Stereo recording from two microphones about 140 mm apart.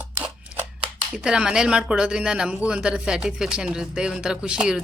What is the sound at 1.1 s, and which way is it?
Speech, 5° right (ahead or behind).